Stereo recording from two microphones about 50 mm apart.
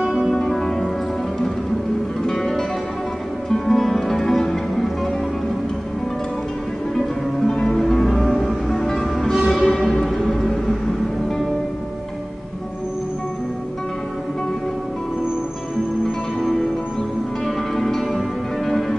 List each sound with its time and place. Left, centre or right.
0.0 s music: centre
0.3 s music: centre
2.2 s music: centre
7.4 s music: centre
9.5 s music: left
10.5 s music: centre
16.3 s music: centre
17.7 s music: centre